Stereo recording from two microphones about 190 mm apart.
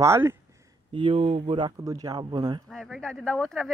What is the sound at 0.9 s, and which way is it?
Speech, 30° right (ahead or behind).